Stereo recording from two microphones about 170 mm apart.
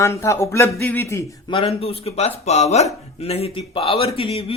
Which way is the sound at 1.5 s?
35° left (ahead or behind).